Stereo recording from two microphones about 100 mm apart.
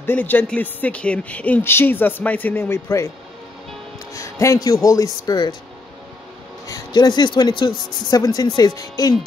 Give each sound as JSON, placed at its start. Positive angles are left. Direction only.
{"t": 0.0, "sound": "speech", "side_deg": 20}
{"t": 4.1, "sound": "a man's voice", "side_deg": 30}
{"t": 6.7, "sound": "speech", "side_deg": 45}